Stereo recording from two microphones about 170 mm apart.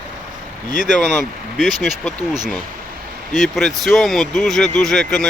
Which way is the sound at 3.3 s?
Centre (ahead or behind).